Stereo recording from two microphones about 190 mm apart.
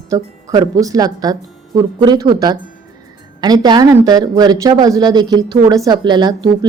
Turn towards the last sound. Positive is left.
turn(degrees=-20)  # may be behind; listen again after turning